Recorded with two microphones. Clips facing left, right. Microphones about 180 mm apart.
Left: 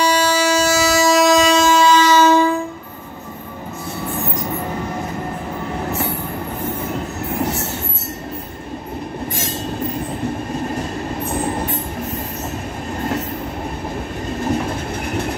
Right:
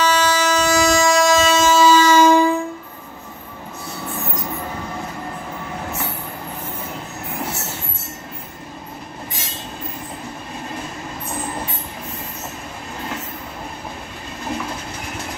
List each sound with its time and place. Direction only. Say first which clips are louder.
0.0 s train: left 2 dB; 10° left (ahead or behind); by 2.4 s 10° right (ahead or behind)